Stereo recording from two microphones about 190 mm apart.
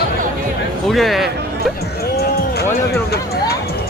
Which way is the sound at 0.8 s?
Centre (ahead or behind).